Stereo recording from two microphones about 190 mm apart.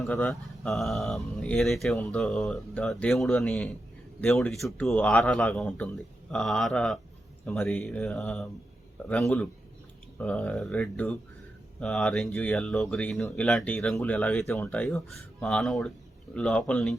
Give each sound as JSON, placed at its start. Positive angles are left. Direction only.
{"t": 0.0, "sound": "speech", "side_deg": 5}